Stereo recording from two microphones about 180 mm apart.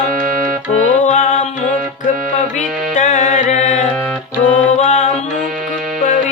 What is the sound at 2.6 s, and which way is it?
Music, 40° left (ahead or behind).